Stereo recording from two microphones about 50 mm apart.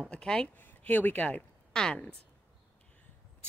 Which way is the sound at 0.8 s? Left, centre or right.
Left.